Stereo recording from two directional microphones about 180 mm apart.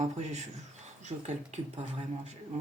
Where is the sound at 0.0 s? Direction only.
40° right (ahead or behind).